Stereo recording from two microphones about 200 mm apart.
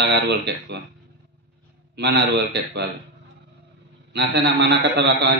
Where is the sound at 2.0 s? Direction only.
60° right (ahead or behind).